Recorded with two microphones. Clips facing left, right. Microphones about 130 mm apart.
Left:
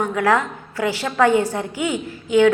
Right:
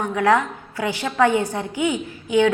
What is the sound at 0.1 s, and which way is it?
A woman's voice, 20° right (ahead or behind).